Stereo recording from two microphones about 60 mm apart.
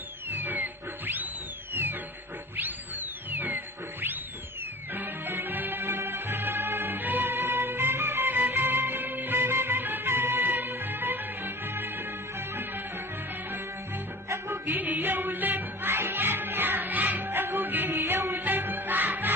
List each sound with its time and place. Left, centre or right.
0.3 s music: right
4.9 s music: right
14.3 s music: right
14.7 s music: right